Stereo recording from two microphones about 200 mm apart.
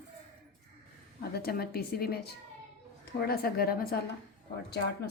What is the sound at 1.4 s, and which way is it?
A woman's voice, 50° left (ahead or behind).